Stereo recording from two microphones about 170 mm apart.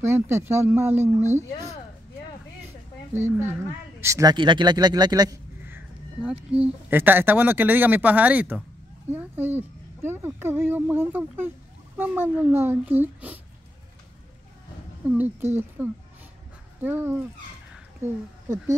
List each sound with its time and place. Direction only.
0.0 s speech: 15° right (ahead or behind)
3.3 s speech: 15° right (ahead or behind)
6.2 s speech: 10° right (ahead or behind)
15.0 s speech: 10° right (ahead or behind)